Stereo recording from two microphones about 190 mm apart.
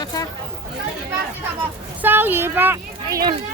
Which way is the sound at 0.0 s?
20° left (ahead or behind).